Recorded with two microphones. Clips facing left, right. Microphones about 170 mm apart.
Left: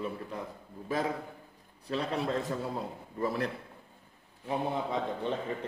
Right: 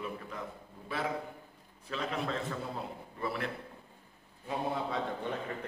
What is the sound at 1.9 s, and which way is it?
A man's voice, 35° left (ahead or behind).